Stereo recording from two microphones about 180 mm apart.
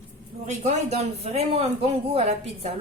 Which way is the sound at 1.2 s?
35° right (ahead or behind).